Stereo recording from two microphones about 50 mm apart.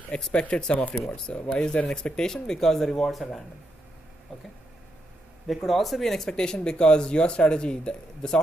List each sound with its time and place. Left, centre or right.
0.3 s speech: left; by 3.3 s centre
5.5 s speech: centre